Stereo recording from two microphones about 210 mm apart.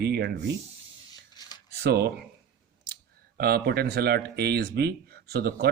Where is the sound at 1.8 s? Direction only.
50° right (ahead or behind).